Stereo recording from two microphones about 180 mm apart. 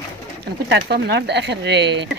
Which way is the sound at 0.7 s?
70° right (ahead or behind).